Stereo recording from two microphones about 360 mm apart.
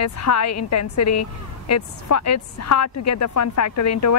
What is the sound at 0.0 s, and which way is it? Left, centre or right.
A woman's voice, left.